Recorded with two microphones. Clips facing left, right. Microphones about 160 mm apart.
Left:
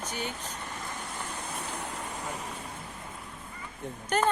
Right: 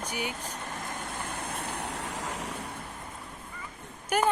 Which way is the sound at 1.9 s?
85° right.